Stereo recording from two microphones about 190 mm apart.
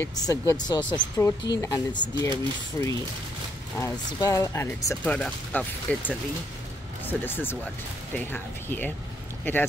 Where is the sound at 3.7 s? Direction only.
15° left (ahead or behind).